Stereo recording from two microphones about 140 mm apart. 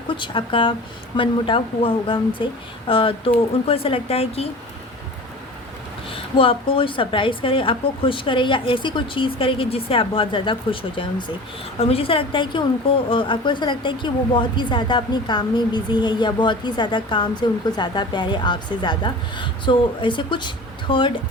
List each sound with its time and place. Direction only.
0.1 s a woman's voice: 35° left (ahead or behind)
6.1 s a woman's voice: 40° left (ahead or behind)